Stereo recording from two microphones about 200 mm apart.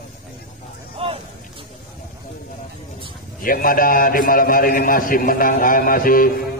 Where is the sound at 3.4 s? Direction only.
45° left (ahead or behind).